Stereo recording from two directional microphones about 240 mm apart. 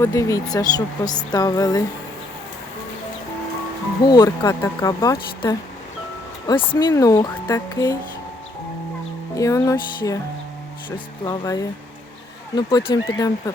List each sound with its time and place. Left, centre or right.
0.0 s speech: centre
4.0 s speech: centre
9.3 s speech: centre